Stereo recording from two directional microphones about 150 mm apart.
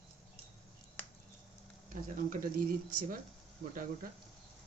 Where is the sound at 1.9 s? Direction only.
65° right (ahead or behind).